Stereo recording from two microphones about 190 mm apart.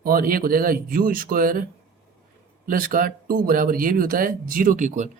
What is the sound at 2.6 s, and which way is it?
Speech, 50° right (ahead or behind).